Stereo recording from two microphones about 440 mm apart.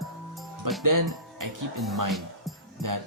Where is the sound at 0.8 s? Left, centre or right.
Right.